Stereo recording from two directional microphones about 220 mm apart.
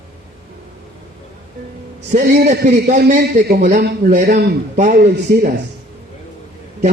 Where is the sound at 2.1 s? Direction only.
40° right (ahead or behind).